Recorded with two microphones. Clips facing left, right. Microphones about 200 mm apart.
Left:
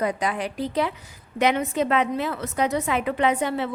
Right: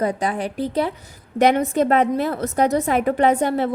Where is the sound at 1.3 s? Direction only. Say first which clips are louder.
Right 5 dB; 45° right (ahead or behind).